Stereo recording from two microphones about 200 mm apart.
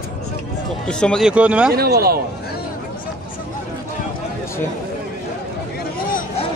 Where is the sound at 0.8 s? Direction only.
5° left (ahead or behind).